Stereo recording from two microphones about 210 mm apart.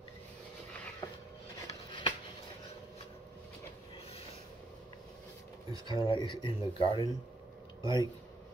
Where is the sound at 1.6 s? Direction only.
25° left (ahead or behind).